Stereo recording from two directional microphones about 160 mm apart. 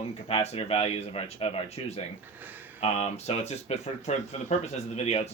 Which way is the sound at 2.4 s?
10° right (ahead or behind).